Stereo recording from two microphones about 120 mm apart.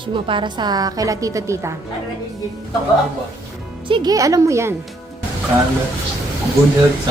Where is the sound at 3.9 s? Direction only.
35° right (ahead or behind).